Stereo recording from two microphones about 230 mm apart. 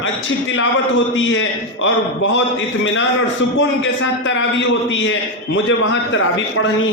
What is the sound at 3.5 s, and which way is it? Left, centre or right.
A man's voice, left.